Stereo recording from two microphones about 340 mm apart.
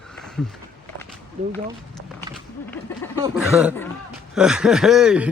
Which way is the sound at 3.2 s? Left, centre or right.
Centre.